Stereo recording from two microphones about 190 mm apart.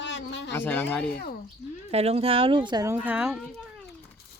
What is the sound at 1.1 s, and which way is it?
Speech, 55° left (ahead or behind).